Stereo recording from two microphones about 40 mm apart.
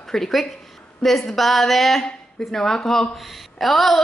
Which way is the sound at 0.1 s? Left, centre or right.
Centre.